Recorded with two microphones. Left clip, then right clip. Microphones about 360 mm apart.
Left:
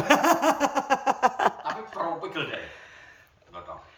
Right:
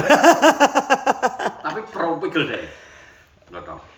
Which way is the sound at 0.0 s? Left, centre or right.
Centre.